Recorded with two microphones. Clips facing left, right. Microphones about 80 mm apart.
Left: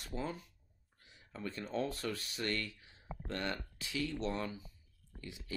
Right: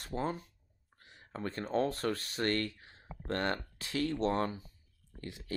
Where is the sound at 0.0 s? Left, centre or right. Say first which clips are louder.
Right 5 dB; right.